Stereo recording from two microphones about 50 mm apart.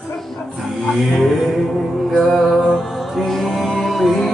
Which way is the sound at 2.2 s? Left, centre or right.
Centre.